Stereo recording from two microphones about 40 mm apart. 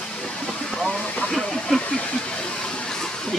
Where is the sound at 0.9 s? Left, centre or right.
Left.